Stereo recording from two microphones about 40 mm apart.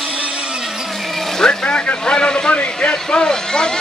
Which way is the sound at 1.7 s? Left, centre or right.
Left.